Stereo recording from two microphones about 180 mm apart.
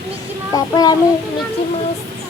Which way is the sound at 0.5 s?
20° left (ahead or behind).